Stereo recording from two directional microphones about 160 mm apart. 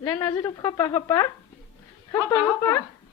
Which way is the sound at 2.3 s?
15° left (ahead or behind).